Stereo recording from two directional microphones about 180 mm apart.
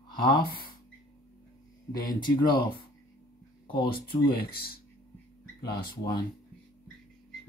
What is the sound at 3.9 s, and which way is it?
Speech, 60° left (ahead or behind).